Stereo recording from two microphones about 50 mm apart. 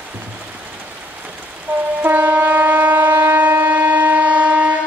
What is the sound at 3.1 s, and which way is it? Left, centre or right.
Siren, right.